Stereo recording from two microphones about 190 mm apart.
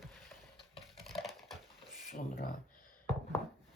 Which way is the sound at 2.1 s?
45° left (ahead or behind).